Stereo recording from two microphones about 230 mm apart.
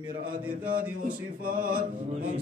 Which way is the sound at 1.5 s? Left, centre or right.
Right.